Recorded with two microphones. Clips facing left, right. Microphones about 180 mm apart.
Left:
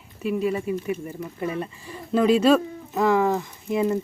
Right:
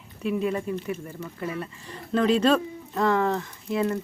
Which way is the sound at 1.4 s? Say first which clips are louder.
Left 4 dB; 20° left (ahead or behind).